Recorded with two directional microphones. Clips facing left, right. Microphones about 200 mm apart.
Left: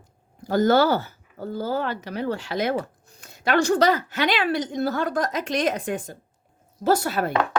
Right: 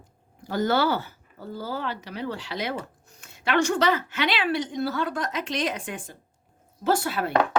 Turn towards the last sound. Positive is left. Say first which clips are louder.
# left 3 dB
turn(degrees=40)  # may be behind; listen again after turning